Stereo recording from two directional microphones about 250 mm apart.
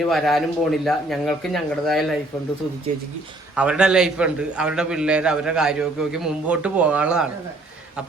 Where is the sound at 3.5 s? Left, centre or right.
Centre.